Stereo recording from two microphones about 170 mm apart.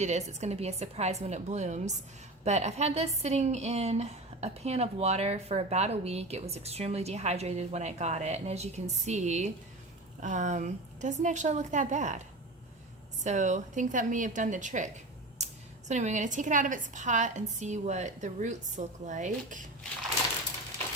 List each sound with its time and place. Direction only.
0.0 s a woman's voice: 40° right (ahead or behind)
13.2 s a woman's voice: 45° right (ahead or behind)
15.9 s a woman's voice: 45° right (ahead or behind)